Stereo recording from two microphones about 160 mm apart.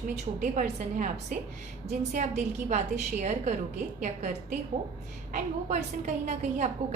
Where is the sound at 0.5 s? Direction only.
50° right (ahead or behind).